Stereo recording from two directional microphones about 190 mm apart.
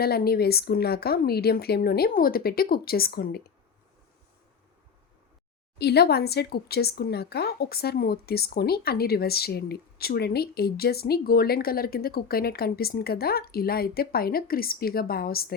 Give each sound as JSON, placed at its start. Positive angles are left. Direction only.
{"t": 0.0, "sound": "speech", "side_deg": 55}
{"t": 5.8, "sound": "speech", "side_deg": 60}